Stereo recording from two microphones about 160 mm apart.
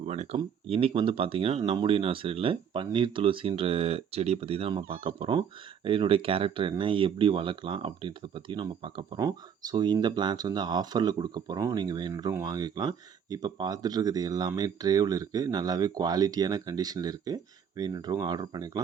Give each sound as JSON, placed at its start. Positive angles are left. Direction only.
{"t": 0.0, "sound": "speech", "side_deg": -45}